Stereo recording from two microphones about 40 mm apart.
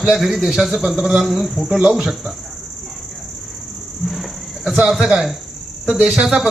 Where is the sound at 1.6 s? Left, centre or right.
Centre.